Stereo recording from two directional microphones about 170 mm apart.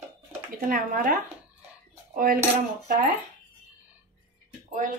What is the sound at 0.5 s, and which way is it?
Speech, 55° right (ahead or behind).